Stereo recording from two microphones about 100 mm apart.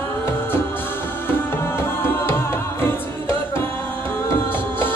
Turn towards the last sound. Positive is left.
turn(degrees=20)  # may be behind; listen again after turning